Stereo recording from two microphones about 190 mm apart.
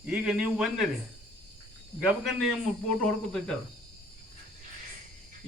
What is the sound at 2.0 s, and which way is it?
A man's voice, centre (ahead or behind).